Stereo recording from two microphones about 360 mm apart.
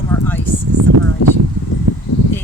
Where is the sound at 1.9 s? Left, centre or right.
Right.